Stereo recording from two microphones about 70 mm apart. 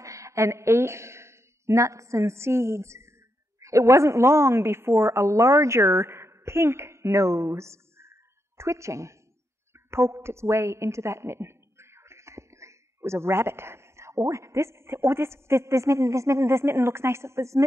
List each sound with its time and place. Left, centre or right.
0.0 s a woman's voice: right